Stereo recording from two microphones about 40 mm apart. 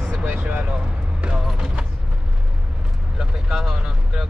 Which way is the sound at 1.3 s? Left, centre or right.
Centre.